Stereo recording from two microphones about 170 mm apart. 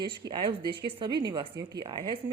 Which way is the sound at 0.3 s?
30° right (ahead or behind).